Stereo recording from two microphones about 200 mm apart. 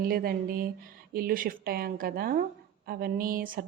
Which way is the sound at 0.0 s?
50° right (ahead or behind).